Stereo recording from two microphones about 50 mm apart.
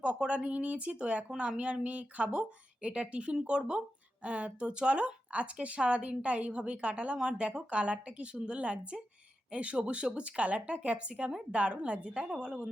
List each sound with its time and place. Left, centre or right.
0.0 s speech: right